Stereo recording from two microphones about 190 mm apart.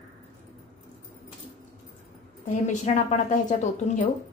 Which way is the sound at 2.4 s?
40° left (ahead or behind).